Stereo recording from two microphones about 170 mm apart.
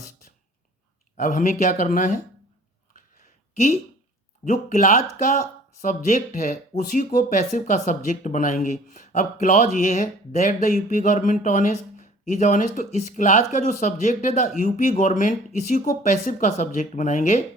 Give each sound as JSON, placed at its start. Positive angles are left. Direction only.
{"t": 1.1, "sound": "speech", "side_deg": 45}
{"t": 2.9, "sound": "a sound", "side_deg": 45}
{"t": 4.4, "sound": "speech", "side_deg": 45}